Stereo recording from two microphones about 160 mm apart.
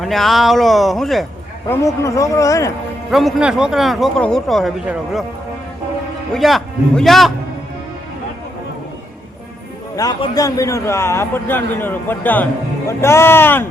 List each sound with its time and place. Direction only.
0.0 s speech: centre (ahead or behind)
1.7 s a man's voice: 20° left (ahead or behind)
3.1 s speech: centre (ahead or behind)
6.3 s speech: centre (ahead or behind)
9.9 s a man's voice: 25° left (ahead or behind)